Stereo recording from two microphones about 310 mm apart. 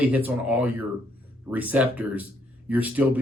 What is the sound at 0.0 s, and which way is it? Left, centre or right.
Speech, centre.